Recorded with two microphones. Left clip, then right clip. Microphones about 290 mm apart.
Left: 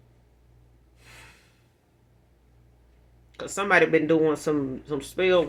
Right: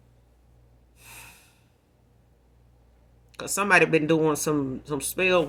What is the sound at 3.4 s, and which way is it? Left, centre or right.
Speech, right.